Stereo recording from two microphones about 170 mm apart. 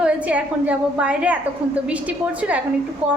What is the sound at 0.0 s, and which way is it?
A woman's voice, 10° right (ahead or behind).